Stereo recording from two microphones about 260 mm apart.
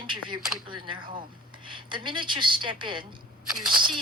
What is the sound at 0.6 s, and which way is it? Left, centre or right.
A woman's voice, centre.